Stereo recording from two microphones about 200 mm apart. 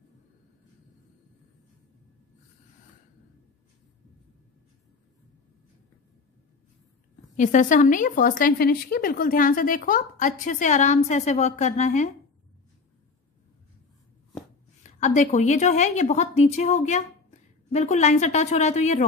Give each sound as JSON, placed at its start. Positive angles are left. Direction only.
{"t": 7.3, "sound": "a woman's voice", "side_deg": 40}
{"t": 14.8, "sound": "a woman's voice", "side_deg": 35}